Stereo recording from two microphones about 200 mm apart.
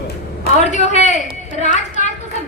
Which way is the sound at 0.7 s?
35° left (ahead or behind).